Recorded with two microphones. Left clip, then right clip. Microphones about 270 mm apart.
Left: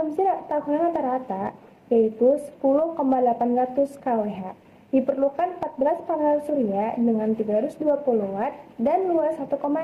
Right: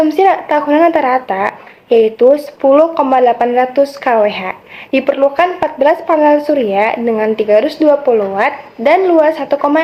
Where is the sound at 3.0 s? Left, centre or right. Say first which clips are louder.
Right 11 dB; centre.